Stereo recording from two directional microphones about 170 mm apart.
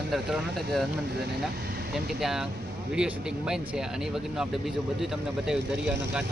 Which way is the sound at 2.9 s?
5° right (ahead or behind).